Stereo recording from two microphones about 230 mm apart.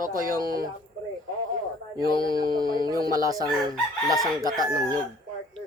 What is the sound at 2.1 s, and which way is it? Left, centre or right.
Speech, left.